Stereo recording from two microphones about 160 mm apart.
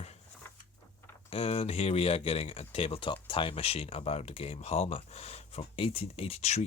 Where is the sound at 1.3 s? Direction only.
40° left (ahead or behind).